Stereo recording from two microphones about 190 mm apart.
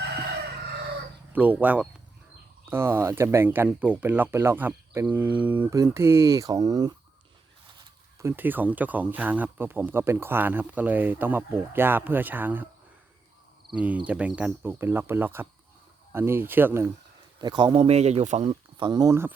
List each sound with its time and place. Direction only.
1.3 s speech: 10° right (ahead or behind)
8.2 s speech: 10° right (ahead or behind)
13.7 s speech: 5° right (ahead or behind)
17.4 s speech: 20° right (ahead or behind)
17.8 s speech: 35° right (ahead or behind); by 19.3 s 15° right (ahead or behind)